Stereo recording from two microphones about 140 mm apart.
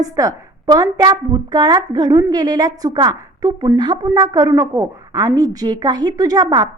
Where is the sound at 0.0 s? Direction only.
25° right (ahead or behind).